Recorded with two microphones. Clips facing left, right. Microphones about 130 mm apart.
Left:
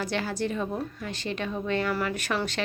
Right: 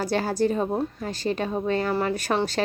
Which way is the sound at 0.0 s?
40° right (ahead or behind).